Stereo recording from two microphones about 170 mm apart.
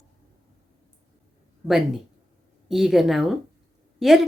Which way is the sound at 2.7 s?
Centre (ahead or behind).